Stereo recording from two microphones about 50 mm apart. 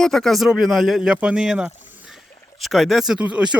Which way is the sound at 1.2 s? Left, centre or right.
Right.